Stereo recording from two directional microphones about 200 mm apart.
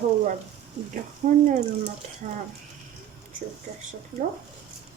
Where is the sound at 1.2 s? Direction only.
35° right (ahead or behind).